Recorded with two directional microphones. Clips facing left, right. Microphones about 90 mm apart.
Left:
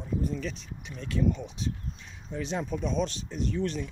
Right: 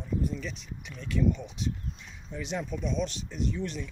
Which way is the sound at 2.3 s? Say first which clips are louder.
Left 2 dB; 30° left (ahead or behind).